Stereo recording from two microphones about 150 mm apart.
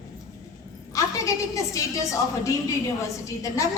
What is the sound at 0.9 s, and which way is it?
A woman's voice, 20° left (ahead or behind).